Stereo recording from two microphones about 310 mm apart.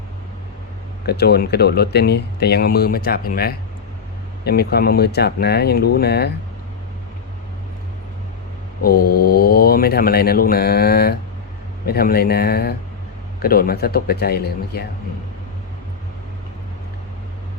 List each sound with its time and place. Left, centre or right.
1.0 s speech: left
8.8 s a man's voice: left